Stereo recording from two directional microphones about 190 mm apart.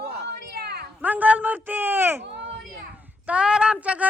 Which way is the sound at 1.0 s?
10° right (ahead or behind).